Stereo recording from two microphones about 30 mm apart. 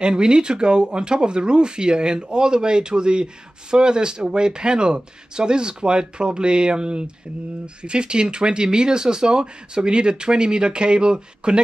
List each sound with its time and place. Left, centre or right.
0.0 s speech: right